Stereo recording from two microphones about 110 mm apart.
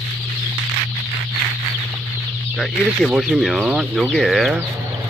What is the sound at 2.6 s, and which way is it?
Speech, centre (ahead or behind).